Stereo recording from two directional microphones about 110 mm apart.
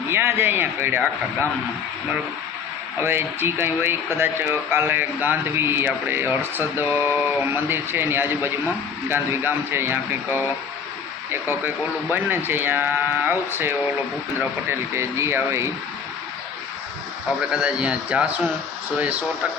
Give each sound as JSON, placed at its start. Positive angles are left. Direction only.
{"t": 0.1, "sound": "speech", "side_deg": -20}
{"t": 3.0, "sound": "speech", "side_deg": -20}
{"t": 14.7, "sound": "speech", "side_deg": -25}
{"t": 17.5, "sound": "a man's voice", "side_deg": -10}